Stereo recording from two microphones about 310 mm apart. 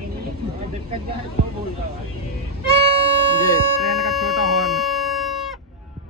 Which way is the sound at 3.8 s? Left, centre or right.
Centre.